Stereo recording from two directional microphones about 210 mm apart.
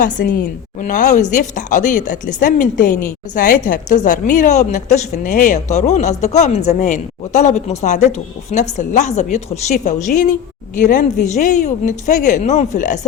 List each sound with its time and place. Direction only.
0.0 s a woman's voice: 40° left (ahead or behind)